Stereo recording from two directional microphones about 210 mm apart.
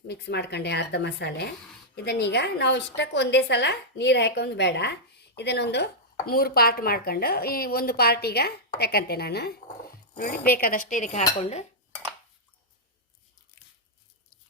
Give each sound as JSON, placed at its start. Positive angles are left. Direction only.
{"t": 0.1, "sound": "a woman's voice", "side_deg": 55}
{"t": 11.3, "sound": "dishes", "side_deg": 30}